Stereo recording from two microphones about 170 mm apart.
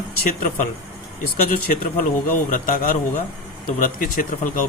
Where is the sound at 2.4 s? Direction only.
50° left (ahead or behind).